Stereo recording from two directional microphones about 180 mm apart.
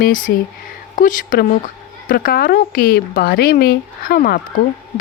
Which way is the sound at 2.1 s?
55° left (ahead or behind).